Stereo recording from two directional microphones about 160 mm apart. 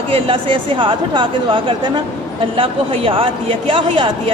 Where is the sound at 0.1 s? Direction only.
35° right (ahead or behind).